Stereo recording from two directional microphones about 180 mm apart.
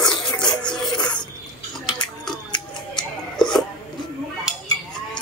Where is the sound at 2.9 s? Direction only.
5° left (ahead or behind).